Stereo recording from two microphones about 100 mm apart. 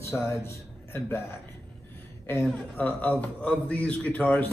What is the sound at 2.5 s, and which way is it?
A man's voice, 15° left (ahead or behind).